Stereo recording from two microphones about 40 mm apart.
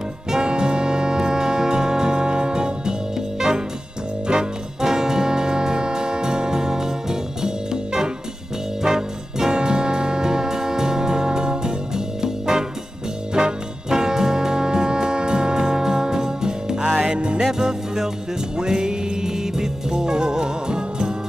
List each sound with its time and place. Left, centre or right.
0.4 s music: right
17.4 s music: centre